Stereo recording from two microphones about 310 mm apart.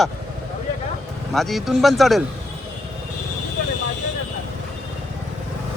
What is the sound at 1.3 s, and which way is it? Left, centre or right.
Speech, centre.